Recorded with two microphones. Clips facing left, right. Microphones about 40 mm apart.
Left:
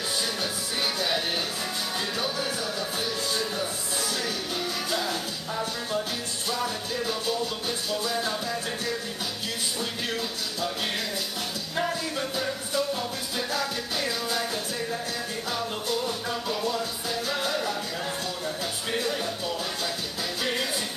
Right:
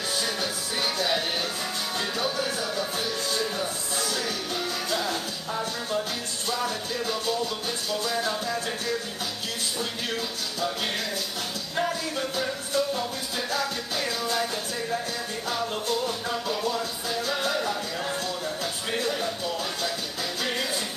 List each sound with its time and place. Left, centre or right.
0.9 s music: centre
7.9 s music: centre
9.8 s speech: centre
11.7 s music: centre
16.1 s music: centre
18.9 s music: centre